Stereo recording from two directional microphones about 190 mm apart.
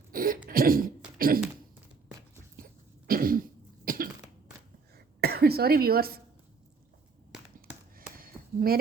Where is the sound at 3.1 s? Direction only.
50° right (ahead or behind).